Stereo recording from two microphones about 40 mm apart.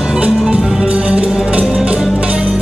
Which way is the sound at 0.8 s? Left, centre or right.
Right.